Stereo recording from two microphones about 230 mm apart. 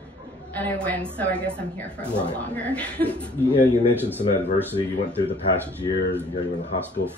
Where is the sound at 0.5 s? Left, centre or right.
Centre.